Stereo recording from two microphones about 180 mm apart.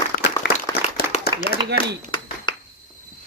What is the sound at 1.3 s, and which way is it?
Clapping, 60° left (ahead or behind).